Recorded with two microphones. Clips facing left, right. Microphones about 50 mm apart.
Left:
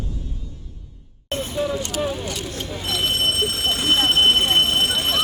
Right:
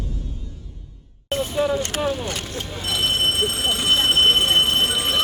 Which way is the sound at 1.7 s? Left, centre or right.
Right.